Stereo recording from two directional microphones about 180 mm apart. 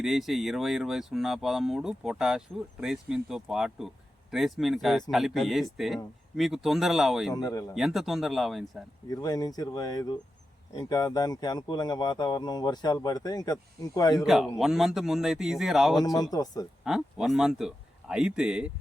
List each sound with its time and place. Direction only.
0.0 s speech: centre (ahead or behind)
7.3 s speech: 20° left (ahead or behind)
7.8 s speech: centre (ahead or behind)
9.0 s speech: 20° left (ahead or behind)
14.3 s speech: centre (ahead or behind)
16.0 s speech: 20° left (ahead or behind)
16.8 s speech: centre (ahead or behind)